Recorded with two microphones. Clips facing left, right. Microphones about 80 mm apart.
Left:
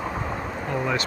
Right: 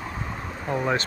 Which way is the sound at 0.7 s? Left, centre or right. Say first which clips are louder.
Right 2 dB; right.